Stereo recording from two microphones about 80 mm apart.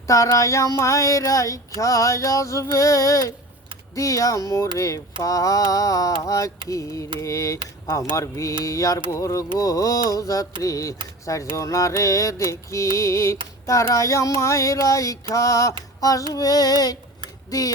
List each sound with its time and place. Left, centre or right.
0.1 s child singing: left
7.2 s music: left
8.6 s child singing: left
9.1 s music: left
9.6 s child singing: left
11.5 s music: left
13.9 s child singing: left